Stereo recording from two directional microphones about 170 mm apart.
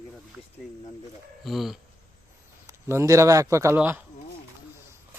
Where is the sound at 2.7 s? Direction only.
15° right (ahead or behind).